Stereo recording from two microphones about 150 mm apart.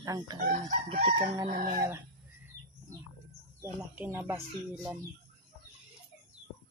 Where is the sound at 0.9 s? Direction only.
35° right (ahead or behind).